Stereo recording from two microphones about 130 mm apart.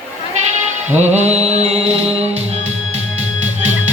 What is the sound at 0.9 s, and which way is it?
Music, 60° right (ahead or behind).